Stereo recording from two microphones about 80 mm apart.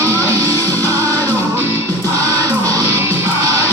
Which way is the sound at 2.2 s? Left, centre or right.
Right.